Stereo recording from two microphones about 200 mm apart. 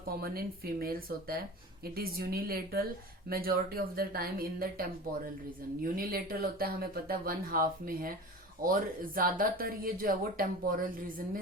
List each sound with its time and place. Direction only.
0.2 s speech: 50° right (ahead or behind)